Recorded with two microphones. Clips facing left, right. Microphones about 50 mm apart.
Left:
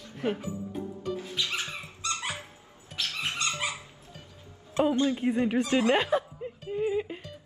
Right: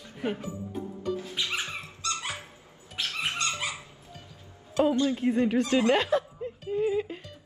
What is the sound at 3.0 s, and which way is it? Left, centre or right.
Dog, right.